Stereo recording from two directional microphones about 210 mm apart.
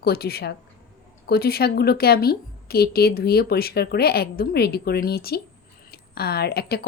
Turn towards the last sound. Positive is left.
turn(degrees=50)  # may be behind; listen again after turning